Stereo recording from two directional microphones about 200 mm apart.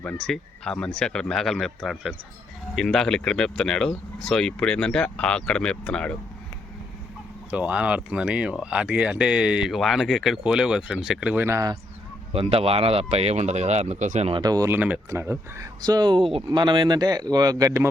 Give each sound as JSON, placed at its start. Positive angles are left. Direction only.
{"t": 0.0, "sound": "speech", "side_deg": 5}
{"t": 7.5, "sound": "speech", "side_deg": -5}
{"t": 12.3, "sound": "speech", "side_deg": -30}
{"t": 14.4, "sound": "speech", "side_deg": -15}